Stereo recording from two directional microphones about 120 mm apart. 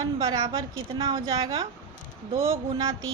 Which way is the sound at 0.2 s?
40° right (ahead or behind).